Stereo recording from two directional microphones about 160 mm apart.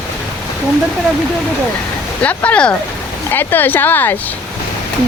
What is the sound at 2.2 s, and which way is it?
Speech, 10° left (ahead or behind).